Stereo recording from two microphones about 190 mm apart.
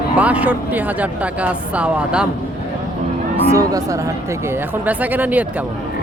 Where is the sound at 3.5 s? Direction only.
20° right (ahead or behind).